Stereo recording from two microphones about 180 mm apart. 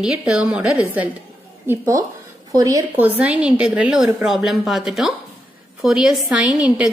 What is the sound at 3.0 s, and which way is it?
A woman's voice, 10° right (ahead or behind).